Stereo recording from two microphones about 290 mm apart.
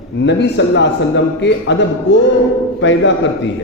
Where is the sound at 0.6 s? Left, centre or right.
Left.